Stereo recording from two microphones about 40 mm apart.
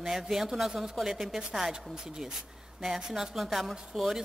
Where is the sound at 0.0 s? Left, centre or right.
Centre.